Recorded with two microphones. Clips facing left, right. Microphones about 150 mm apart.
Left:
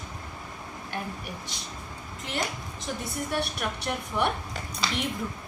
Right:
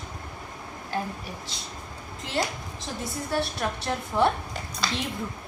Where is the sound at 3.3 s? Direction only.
25° right (ahead or behind).